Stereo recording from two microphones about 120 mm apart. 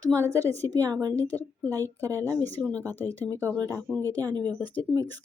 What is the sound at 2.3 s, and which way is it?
Speech, 15° left (ahead or behind).